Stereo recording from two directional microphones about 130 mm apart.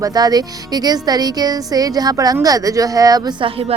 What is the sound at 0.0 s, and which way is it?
Speech, 30° right (ahead or behind).